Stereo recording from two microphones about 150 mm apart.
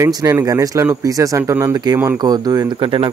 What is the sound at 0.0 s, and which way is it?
Speech, 20° right (ahead or behind).